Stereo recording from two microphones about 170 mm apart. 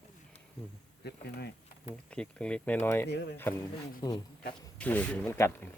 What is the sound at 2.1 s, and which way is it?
Speech, 5° left (ahead or behind).